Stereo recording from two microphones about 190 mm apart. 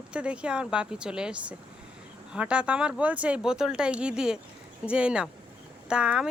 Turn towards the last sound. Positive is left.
turn(degrees=-5)  # may be behind; listen again after turning